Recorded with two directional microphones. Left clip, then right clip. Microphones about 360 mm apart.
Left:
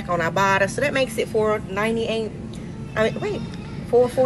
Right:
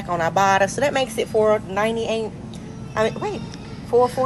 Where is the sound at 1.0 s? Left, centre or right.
Right.